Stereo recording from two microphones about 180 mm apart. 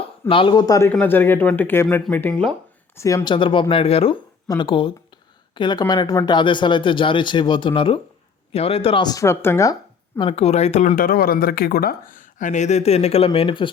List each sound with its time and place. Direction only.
0.0 s a man's voice: 30° left (ahead or behind)
10.2 s speech: 30° left (ahead or behind)